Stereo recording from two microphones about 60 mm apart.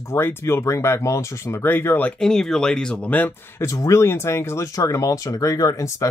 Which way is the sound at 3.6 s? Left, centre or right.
Left.